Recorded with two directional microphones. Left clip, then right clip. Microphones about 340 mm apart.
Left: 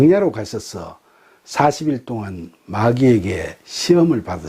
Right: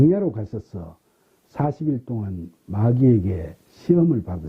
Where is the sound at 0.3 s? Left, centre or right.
Centre.